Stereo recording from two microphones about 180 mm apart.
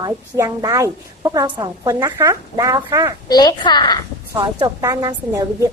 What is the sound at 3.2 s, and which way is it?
Speech, 20° left (ahead or behind).